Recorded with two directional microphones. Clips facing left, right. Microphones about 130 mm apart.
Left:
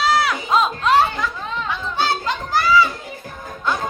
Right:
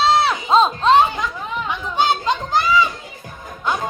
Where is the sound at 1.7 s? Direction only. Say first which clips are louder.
Right 3 dB; 20° right (ahead or behind).